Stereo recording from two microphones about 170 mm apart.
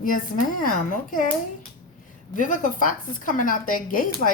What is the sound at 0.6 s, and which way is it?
Speech, 50° left (ahead or behind).